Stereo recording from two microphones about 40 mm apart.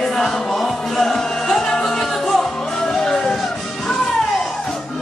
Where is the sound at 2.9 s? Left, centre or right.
Centre.